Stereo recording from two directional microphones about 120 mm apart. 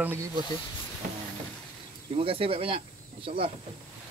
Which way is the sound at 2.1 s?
50° right (ahead or behind).